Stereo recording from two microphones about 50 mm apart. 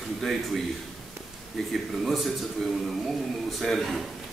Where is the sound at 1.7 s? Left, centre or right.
Centre.